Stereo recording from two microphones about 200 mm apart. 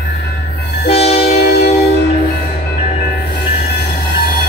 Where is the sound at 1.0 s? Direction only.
30° left (ahead or behind).